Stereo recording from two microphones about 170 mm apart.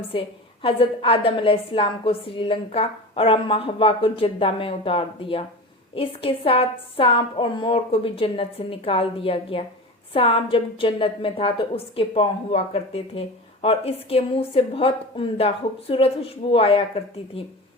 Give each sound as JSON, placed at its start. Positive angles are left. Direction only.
{"t": 0.1, "sound": "a woman's voice", "side_deg": 35}